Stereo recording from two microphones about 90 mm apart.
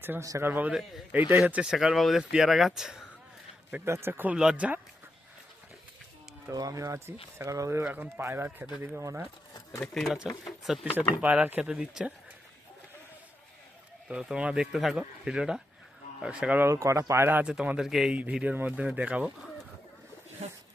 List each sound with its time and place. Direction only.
0.2 s speech: 35° right (ahead or behind)
0.7 s speech: 5° right (ahead or behind)
1.3 s speech: 20° right (ahead or behind)
1.7 s speech: 5° right (ahead or behind)
3.8 s speech: 30° right (ahead or behind)
4.4 s speech: 10° right (ahead or behind)
6.5 s speech: 40° right (ahead or behind)
9.9 s speech: 5° left (ahead or behind)
11.2 s speech: 20° right (ahead or behind)
14.1 s speech: 10° right (ahead or behind)
16.6 s speech: 30° right (ahead or behind)
17.4 s speech: 10° right (ahead or behind)